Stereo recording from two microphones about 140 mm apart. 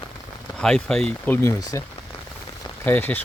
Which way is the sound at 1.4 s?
20° left (ahead or behind).